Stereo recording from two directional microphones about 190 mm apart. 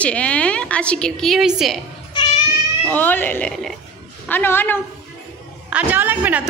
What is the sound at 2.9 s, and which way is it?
Speech, 10° left (ahead or behind).